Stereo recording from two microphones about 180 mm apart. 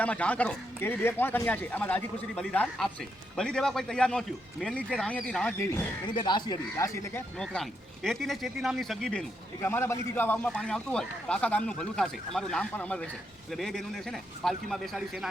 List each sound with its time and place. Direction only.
0.0 s speech: 5° left (ahead or behind)
7.3 s speech: 5° left (ahead or behind)
9.6 s speech: 15° left (ahead or behind)